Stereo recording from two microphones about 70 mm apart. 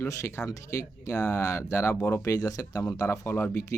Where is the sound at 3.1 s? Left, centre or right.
Left.